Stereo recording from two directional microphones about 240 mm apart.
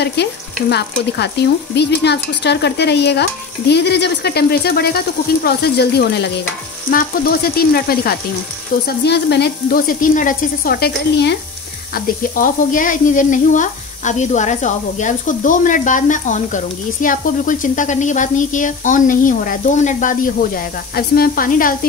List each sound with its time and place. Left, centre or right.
0.0 s speech: left